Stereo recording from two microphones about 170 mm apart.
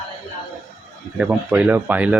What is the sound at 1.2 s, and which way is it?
Speech, 10° right (ahead or behind).